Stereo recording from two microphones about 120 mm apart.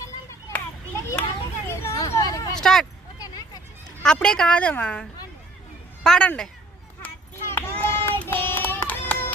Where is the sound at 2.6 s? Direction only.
5° left (ahead or behind).